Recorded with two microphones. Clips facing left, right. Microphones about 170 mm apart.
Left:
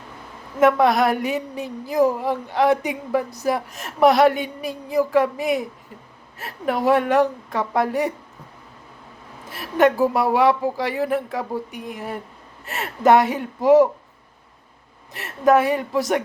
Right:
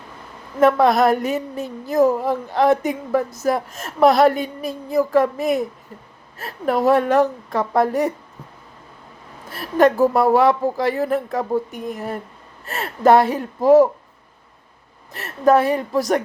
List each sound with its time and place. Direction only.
0.6 s a woman's voice: 40° right (ahead or behind)
1.4 s a sound: 15° left (ahead or behind)
1.9 s a woman's voice: 40° right (ahead or behind)
9.5 s a woman's voice: 40° right (ahead or behind)
15.2 s a woman's voice: 40° right (ahead or behind)